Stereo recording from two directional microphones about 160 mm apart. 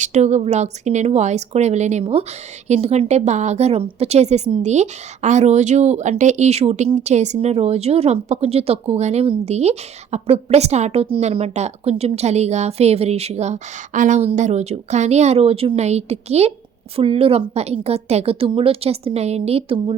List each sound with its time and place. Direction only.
0.0 s a woman's voice: 45° right (ahead or behind)